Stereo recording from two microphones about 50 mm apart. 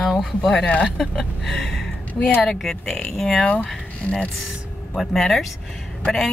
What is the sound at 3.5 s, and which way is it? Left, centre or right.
Speech, left.